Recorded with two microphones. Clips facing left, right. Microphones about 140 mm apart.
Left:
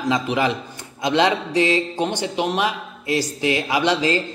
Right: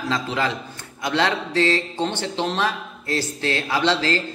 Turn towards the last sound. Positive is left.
turn(degrees=15)  # may be behind; listen again after turning